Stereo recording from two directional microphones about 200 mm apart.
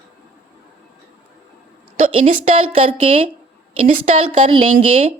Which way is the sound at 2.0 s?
40° right (ahead or behind).